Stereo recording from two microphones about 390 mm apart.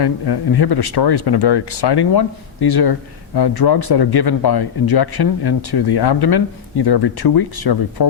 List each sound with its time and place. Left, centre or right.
0.0 s speech: left